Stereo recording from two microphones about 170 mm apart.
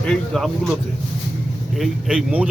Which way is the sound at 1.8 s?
5° right (ahead or behind).